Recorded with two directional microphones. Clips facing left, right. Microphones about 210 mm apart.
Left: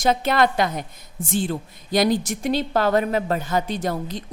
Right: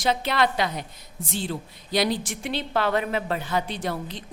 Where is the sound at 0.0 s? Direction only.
45° left (ahead or behind).